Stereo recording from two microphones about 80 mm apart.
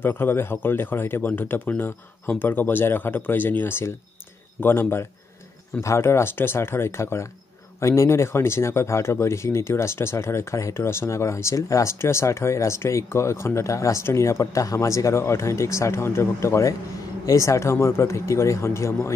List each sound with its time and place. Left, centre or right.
0.0 s speech: left